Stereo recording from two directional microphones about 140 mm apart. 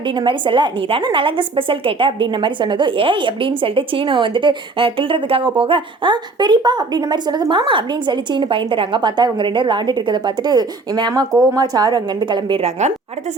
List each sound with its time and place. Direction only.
0.2 s a woman's voice: 35° right (ahead or behind)